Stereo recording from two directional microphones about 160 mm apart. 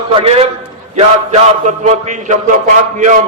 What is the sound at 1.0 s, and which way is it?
A man's voice, 45° right (ahead or behind).